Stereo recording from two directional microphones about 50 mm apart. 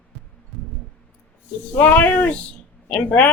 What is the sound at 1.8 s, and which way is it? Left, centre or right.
A woman's voice, left.